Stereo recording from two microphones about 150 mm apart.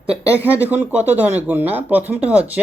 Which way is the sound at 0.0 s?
5° right (ahead or behind).